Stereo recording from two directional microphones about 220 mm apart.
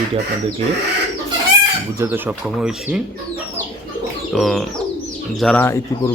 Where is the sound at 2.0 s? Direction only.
10° right (ahead or behind).